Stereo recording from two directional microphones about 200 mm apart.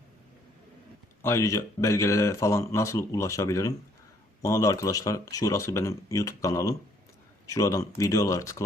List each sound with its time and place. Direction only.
1.2 s speech: 15° left (ahead or behind)